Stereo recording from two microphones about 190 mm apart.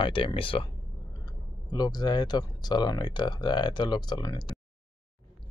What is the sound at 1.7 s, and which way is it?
Speech, 20° left (ahead or behind).